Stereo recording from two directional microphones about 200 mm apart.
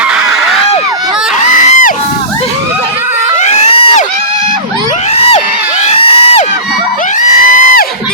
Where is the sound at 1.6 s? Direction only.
40° left (ahead or behind).